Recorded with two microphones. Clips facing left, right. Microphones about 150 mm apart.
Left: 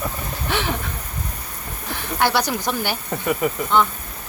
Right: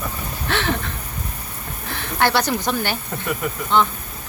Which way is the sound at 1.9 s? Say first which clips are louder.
Right 1 dB; 10° left (ahead or behind).